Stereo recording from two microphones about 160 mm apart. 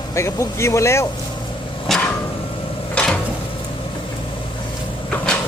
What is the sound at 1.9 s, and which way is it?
Vehicle, centre (ahead or behind).